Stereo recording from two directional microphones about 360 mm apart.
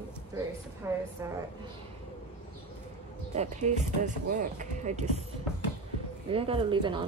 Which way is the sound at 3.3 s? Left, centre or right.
Centre.